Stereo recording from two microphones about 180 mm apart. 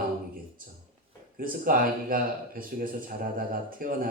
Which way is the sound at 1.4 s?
50° right (ahead or behind).